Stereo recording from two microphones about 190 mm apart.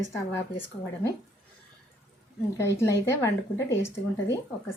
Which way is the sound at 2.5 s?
15° left (ahead or behind).